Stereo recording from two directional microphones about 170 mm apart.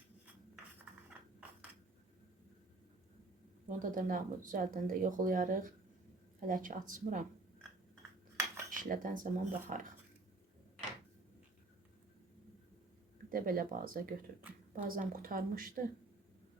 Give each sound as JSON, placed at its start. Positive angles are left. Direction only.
{"t": 3.7, "sound": "speech", "side_deg": -50}
{"t": 8.7, "sound": "speech", "side_deg": -50}
{"t": 13.3, "sound": "speech", "side_deg": -55}